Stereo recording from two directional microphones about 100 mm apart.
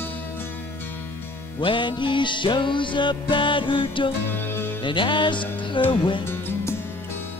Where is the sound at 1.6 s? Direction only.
55° left (ahead or behind).